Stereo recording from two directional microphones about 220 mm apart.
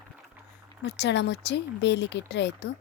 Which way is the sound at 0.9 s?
50° left (ahead or behind).